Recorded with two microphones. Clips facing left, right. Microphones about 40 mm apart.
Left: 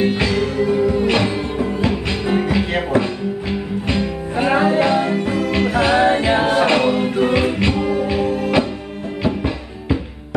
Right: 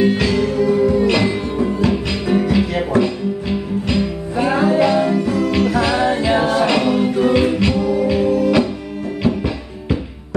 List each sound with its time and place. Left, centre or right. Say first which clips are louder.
0.0 s music: right 2 dB; left
9.2 s music: right 1 dB; left